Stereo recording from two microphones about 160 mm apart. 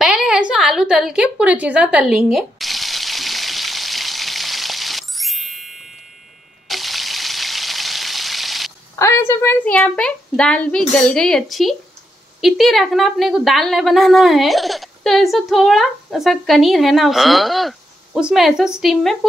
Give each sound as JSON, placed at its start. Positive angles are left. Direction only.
{"t": 0.0, "sound": "a sound", "side_deg": -5}
{"t": 6.7, "sound": "frying", "side_deg": 0}
{"t": 8.9, "sound": "a woman's voice", "side_deg": 15}